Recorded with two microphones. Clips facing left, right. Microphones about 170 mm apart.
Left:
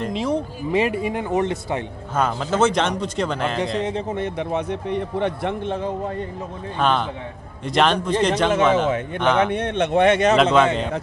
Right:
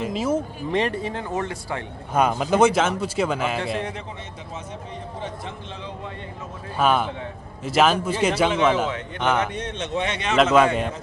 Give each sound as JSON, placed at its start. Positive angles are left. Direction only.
{"t": 0.0, "sound": "a man's voice", "side_deg": -5}
{"t": 0.7, "sound": "speech", "side_deg": 5}
{"t": 2.1, "sound": "speech", "side_deg": -15}
{"t": 3.6, "sound": "speech", "side_deg": 20}
{"t": 4.1, "sound": "a man's voice", "side_deg": 60}
{"t": 6.8, "sound": "a man's voice", "side_deg": -5}
{"t": 9.5, "sound": "a man's voice", "side_deg": 60}
{"t": 10.3, "sound": "a man's voice", "side_deg": -5}